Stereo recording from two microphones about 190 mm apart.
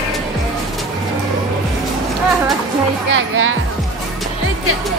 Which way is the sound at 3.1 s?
90° right.